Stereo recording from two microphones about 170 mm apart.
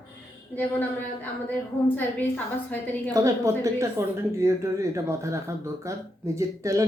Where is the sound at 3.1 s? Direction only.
20° right (ahead or behind).